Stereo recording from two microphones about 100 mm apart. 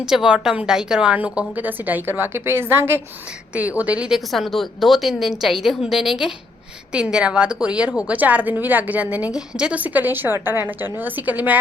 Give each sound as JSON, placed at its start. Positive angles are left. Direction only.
{"t": 0.0, "sound": "a woman's voice", "side_deg": -5}
{"t": 3.8, "sound": "a woman's voice", "side_deg": -15}
{"t": 4.3, "sound": "a woman's voice", "side_deg": 0}